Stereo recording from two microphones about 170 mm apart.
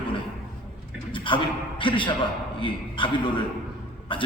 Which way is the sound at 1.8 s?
30° left (ahead or behind).